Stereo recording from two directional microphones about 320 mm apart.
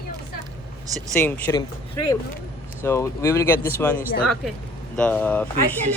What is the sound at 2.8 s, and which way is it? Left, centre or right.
Speech, centre.